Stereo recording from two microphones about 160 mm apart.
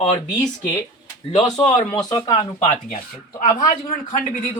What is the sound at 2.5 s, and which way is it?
Speech, 45° left (ahead or behind).